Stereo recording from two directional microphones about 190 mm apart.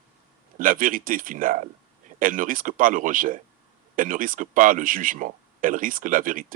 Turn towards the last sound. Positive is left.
turn(degrees=-45)  # may be behind; listen again after turning